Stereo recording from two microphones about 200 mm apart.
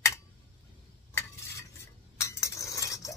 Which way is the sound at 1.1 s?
15° left (ahead or behind).